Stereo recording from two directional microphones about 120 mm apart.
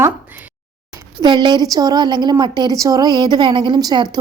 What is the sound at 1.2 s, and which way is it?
A woman's voice, 40° right (ahead or behind).